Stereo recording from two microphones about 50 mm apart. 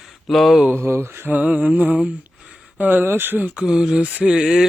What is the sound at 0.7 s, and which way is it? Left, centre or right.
Mantra, right.